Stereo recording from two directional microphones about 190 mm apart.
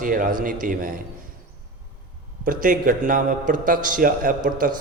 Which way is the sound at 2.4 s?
45° right (ahead or behind).